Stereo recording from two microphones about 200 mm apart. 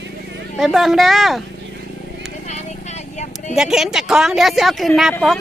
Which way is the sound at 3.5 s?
Centre (ahead or behind).